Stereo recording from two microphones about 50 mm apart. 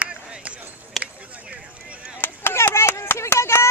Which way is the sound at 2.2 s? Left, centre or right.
Left.